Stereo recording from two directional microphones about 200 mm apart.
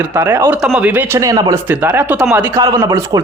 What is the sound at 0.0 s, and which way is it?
Speech, 15° right (ahead or behind).